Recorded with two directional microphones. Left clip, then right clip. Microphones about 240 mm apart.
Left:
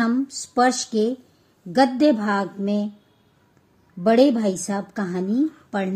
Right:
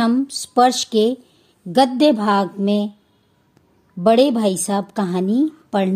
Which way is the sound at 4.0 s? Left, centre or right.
Right.